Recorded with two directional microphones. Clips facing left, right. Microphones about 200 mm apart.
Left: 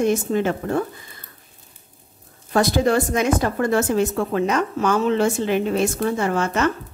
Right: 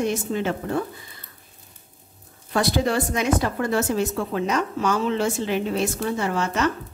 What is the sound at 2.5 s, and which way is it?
A woman's voice, 45° left (ahead or behind).